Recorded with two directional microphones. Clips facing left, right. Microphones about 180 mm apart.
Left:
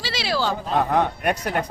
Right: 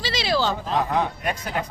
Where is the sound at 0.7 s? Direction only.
55° left (ahead or behind).